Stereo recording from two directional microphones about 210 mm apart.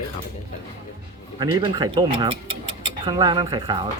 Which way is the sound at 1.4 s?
20° right (ahead or behind).